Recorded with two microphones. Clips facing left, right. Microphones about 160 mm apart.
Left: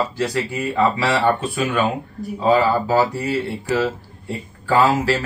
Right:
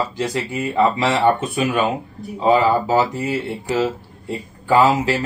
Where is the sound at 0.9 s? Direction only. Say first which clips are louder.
Right 2 dB; 20° right (ahead or behind).